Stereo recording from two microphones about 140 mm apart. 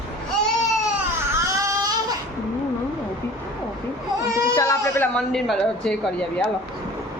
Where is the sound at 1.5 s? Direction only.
20° right (ahead or behind).